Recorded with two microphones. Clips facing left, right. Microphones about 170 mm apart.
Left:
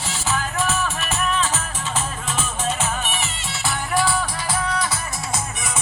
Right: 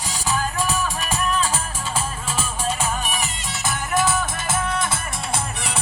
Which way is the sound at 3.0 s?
40° right (ahead or behind).